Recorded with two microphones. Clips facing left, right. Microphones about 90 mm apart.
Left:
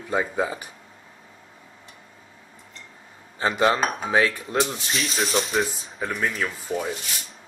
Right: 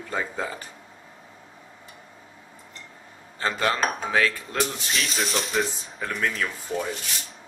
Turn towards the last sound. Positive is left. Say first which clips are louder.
# left 1 dB
turn(degrees=5)  # may be behind; listen again after turning